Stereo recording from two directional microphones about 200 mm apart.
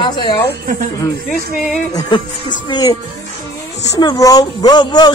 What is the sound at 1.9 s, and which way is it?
Speech, 20° left (ahead or behind).